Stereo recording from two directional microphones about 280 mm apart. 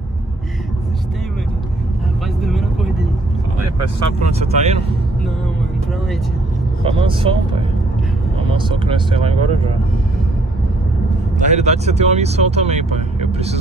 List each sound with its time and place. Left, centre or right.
2.4 s vehicle: centre
4.2 s speech: right
6.8 s speech: centre
11.3 s speech: right